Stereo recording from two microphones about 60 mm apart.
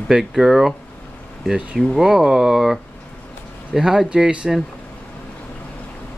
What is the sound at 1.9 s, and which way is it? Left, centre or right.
Speech, centre.